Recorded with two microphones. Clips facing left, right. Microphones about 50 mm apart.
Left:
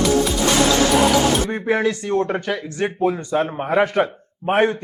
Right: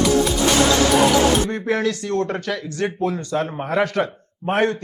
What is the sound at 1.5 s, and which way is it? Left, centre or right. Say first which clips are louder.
Speech: left 2 dB; centre.